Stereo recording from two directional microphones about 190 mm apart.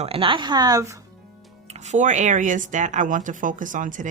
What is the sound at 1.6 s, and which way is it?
Speech, 35° right (ahead or behind).